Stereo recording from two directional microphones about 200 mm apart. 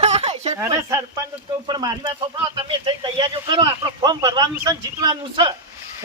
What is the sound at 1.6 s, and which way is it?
Speech, 20° right (ahead or behind).